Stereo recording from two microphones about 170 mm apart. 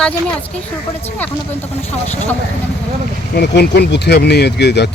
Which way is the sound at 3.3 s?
75° left (ahead or behind).